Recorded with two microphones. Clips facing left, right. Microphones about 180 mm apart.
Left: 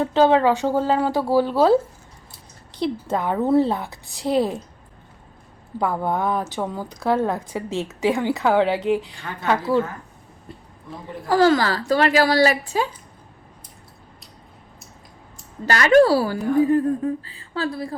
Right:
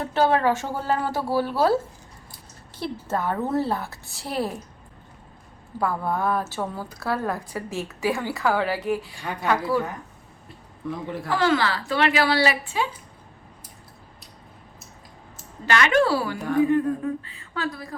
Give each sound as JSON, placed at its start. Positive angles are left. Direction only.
{"t": 0.0, "sound": "a woman's voice", "side_deg": 15}
{"t": 5.8, "sound": "a woman's voice", "side_deg": 20}
{"t": 9.1, "sound": "a woman's voice", "side_deg": -15}
{"t": 11.3, "sound": "a woman's voice", "side_deg": 40}
{"t": 15.6, "sound": "a woman's voice", "side_deg": 35}